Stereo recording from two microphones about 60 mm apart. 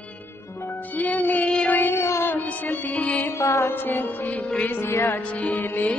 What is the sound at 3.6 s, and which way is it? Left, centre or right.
Music, left.